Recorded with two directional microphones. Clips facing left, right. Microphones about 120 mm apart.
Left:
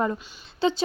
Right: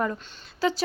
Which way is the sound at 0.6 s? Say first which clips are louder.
Left 2 dB; 25° left (ahead or behind).